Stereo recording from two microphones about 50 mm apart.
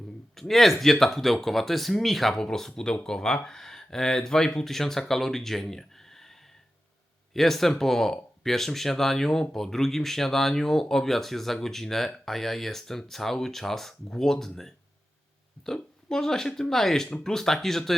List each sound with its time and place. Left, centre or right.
0.3 s speech: centre